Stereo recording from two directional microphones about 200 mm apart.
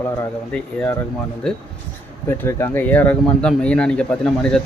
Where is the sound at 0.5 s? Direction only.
5° left (ahead or behind).